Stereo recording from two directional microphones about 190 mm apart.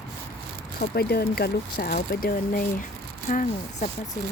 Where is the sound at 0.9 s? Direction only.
55° left (ahead or behind).